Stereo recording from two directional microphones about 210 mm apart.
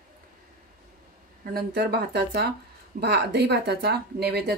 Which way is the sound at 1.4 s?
50° right (ahead or behind).